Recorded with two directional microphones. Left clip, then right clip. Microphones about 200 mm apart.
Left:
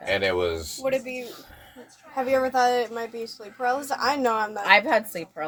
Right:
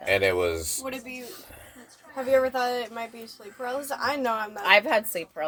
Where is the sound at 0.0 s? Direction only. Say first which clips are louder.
Right 1 dB; 25° right (ahead or behind).